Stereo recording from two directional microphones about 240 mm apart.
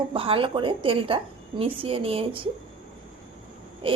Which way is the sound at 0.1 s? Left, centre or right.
Right.